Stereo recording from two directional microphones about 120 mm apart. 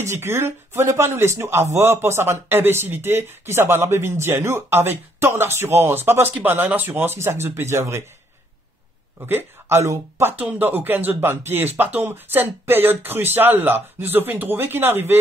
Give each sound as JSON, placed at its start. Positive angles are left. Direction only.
{"t": 0.0, "sound": "speech", "side_deg": -20}
{"t": 9.2, "sound": "speech", "side_deg": -20}